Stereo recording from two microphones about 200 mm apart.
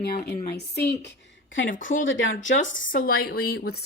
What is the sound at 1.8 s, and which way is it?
Speech, 75° left (ahead or behind).